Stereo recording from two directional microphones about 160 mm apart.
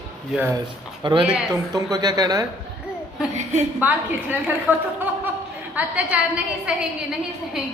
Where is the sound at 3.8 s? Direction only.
10° right (ahead or behind).